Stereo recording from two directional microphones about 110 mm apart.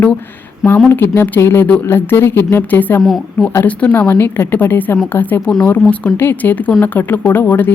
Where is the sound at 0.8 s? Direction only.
20° left (ahead or behind).